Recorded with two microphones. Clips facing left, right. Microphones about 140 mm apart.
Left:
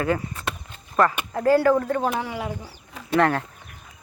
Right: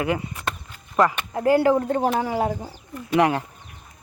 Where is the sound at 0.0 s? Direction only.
15° right (ahead or behind).